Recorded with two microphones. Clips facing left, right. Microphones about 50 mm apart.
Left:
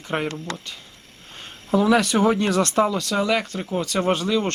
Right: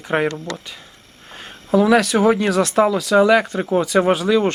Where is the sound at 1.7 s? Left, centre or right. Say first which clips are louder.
Right 4 dB; centre.